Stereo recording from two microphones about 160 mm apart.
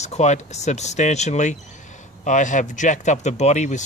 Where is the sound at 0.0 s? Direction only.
45° left (ahead or behind).